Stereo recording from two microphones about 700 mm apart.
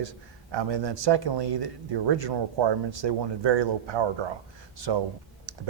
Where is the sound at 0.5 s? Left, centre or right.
Right.